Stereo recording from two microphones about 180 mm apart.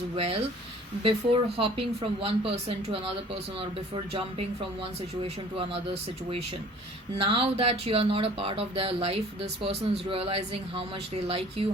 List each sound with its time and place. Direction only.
1.0 s speech: 30° right (ahead or behind)
5.5 s speech: 30° right (ahead or behind)